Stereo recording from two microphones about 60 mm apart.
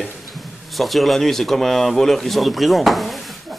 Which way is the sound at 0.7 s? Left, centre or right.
Centre.